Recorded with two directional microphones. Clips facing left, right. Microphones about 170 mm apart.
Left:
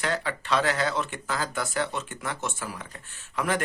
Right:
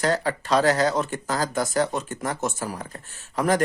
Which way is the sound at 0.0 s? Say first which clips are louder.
Right 6 dB; 40° right (ahead or behind).